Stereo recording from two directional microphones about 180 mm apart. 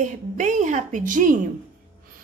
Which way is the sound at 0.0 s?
45° right (ahead or behind).